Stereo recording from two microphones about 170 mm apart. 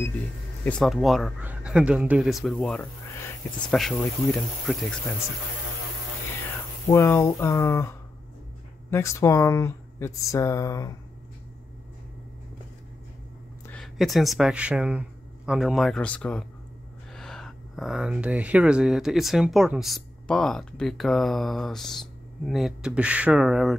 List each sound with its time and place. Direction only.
0.7 s speech: 5° left (ahead or behind)
6.9 s speech: 15° left (ahead or behind)
8.9 s speech: 15° left (ahead or behind)
13.7 s speech: centre (ahead or behind)